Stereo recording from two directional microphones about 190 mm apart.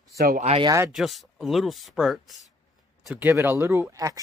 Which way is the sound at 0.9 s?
Centre (ahead or behind).